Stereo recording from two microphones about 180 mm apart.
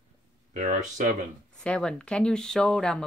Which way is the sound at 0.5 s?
40° right (ahead or behind).